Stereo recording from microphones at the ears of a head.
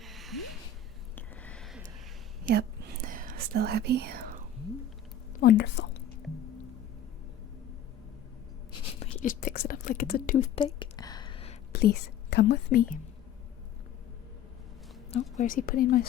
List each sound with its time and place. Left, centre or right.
2.4 s whispering: right
5.4 s a woman's voice: left
8.7 s whispering: left
15.1 s a woman's voice: left